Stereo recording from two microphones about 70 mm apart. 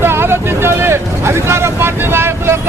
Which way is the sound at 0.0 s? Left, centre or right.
Right.